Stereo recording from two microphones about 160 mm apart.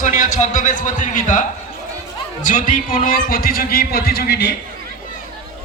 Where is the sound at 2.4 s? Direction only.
55° left (ahead or behind); by 4.6 s 90° left.